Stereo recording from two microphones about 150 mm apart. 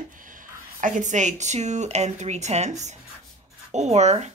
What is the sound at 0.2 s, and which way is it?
Speech, 65° right (ahead or behind).